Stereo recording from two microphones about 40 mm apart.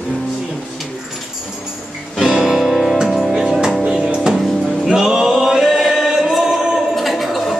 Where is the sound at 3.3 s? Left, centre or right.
Centre.